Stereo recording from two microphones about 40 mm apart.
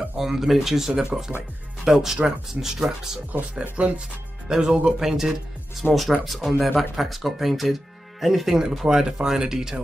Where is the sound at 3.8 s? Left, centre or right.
Right.